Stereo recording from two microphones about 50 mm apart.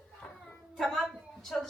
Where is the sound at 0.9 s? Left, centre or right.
Centre.